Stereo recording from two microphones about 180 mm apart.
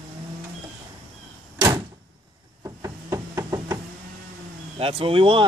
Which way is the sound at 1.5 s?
20° right (ahead or behind).